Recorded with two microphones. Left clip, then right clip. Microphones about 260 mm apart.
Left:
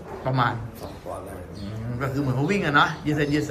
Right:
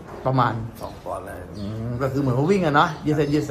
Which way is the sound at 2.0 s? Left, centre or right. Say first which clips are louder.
Right 4 dB; right.